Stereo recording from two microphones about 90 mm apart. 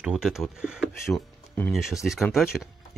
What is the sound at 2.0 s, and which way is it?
Dog, 10° left (ahead or behind).